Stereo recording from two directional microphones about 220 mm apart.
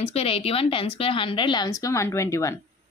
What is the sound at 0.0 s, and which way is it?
A woman's voice, 25° left (ahead or behind).